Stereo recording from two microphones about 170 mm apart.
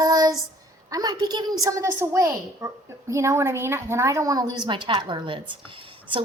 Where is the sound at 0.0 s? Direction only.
20° right (ahead or behind).